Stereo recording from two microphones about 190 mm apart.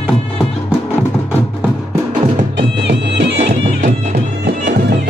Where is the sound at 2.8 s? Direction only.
65° right (ahead or behind).